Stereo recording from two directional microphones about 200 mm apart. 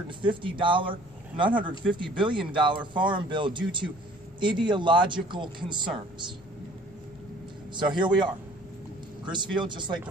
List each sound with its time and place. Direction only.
0.2 s speech: 25° right (ahead or behind)
7.7 s speech: 25° right (ahead or behind)